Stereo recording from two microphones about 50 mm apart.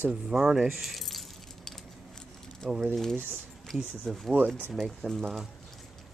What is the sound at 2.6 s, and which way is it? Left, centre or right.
Speech, centre.